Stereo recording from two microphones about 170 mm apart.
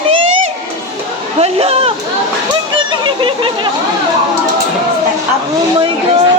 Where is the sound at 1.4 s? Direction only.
35° right (ahead or behind).